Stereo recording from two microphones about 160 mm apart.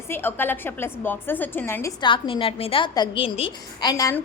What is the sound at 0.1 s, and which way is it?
A woman's voice, 15° left (ahead or behind).